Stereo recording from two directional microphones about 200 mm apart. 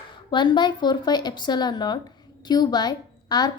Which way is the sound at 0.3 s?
25° left (ahead or behind).